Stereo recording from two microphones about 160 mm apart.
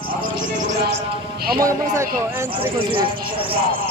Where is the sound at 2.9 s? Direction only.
35° right (ahead or behind).